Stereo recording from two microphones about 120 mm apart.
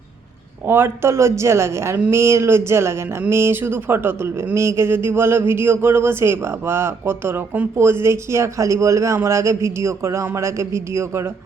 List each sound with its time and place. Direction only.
0.7 s speech: 20° right (ahead or behind)